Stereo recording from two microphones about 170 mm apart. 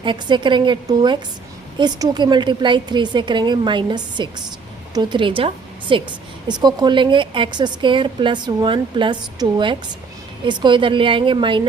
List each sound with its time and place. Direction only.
0.0 s a woman's voice: 30° right (ahead or behind)